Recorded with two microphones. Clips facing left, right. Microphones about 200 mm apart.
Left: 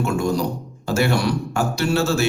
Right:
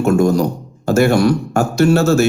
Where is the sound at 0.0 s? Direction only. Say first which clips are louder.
Right 8 dB; 45° right (ahead or behind).